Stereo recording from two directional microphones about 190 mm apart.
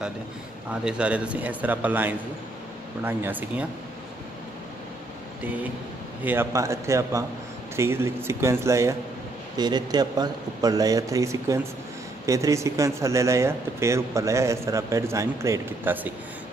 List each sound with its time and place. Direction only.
0.7 s speech: 5° right (ahead or behind)
6.2 s a man's voice: 10° right (ahead or behind)